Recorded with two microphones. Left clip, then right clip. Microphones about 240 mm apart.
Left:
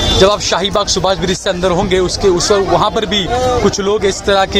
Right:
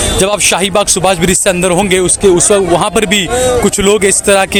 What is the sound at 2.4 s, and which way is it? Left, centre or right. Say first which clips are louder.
Speech: right 2 dB; right.